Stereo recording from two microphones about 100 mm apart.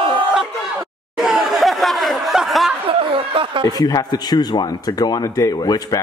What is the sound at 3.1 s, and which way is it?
Speech, 65° right (ahead or behind).